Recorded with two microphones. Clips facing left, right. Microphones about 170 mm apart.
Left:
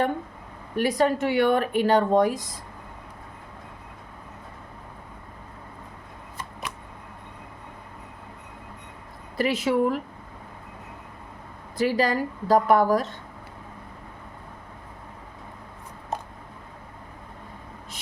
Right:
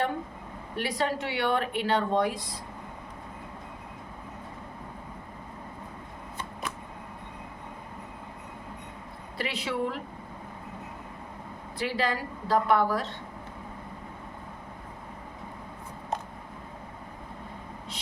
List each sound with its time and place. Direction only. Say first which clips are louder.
0.8 s speech: left 7 dB; 45° left (ahead or behind)
9.4 s speech: left 8 dB; 45° left (ahead or behind)
11.8 s speech: left 7 dB; 40° left (ahead or behind)